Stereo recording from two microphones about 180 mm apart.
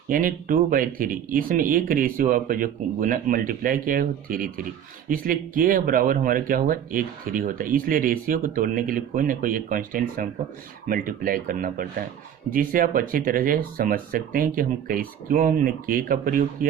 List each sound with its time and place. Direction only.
0.1 s speech: 50° right (ahead or behind)